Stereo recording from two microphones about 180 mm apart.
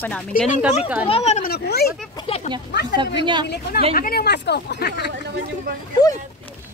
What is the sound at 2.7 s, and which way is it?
Speech, 75° left (ahead or behind).